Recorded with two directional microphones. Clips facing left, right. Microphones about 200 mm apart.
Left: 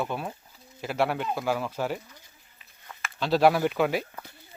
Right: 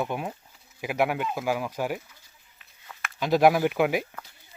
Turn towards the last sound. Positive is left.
turn(degrees=-15)  # may be behind; listen again after turning